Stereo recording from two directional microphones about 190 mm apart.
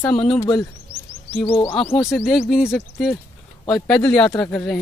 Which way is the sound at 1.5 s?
30° left (ahead or behind).